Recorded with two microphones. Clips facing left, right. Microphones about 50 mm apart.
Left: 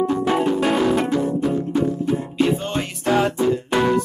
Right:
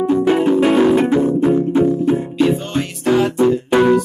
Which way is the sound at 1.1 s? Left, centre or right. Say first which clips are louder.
Right 6 dB; right.